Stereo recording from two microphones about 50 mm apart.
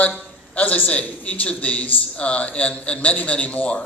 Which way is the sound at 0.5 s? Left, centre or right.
Left.